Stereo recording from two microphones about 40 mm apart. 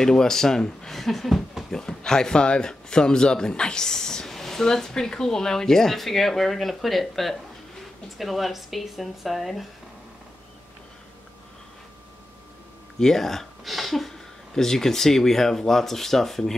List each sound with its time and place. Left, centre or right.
0.0 s speech: centre
1.7 s speech: centre
13.0 s speech: centre